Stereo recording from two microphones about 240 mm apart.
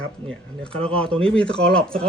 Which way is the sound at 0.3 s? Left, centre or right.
Centre.